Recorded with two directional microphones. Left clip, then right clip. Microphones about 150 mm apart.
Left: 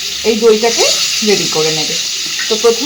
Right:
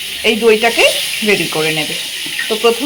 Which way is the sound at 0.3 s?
5° right (ahead or behind).